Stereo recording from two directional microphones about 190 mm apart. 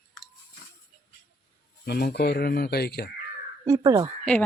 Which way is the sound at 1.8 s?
55° left (ahead or behind).